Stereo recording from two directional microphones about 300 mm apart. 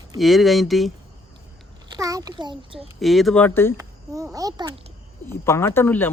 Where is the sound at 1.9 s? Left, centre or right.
Centre.